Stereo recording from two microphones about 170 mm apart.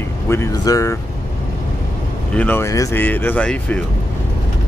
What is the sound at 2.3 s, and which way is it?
Speech, 10° left (ahead or behind).